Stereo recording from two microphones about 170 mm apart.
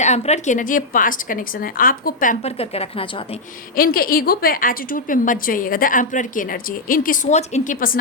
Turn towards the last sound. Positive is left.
turn(degrees=55)  # may be behind; listen again after turning